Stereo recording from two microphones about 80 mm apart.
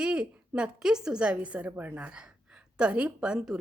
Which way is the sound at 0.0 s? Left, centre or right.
Centre.